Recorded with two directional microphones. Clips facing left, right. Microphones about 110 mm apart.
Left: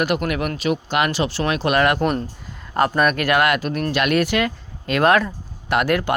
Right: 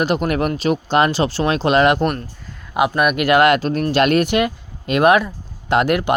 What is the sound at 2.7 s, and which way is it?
Speech, 10° right (ahead or behind).